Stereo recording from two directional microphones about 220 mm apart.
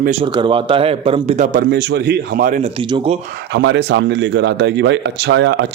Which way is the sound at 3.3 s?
50° right (ahead or behind).